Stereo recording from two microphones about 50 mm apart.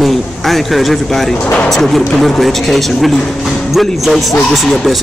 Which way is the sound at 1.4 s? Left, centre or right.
Left.